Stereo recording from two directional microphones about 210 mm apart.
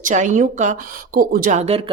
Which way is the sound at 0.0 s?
35° right (ahead or behind).